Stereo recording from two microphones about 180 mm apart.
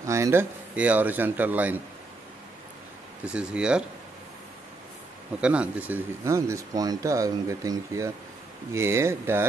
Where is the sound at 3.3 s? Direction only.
5° right (ahead or behind).